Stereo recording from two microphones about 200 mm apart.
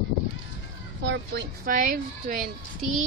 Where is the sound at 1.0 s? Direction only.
60° right (ahead or behind); by 2.5 s 45° right (ahead or behind).